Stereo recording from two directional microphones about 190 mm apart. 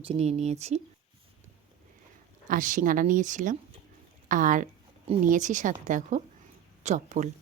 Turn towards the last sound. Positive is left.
turn(degrees=-40)  # may be behind; listen again after turning